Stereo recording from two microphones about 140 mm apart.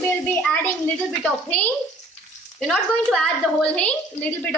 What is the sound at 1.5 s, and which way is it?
A woman's voice, 10° left (ahead or behind).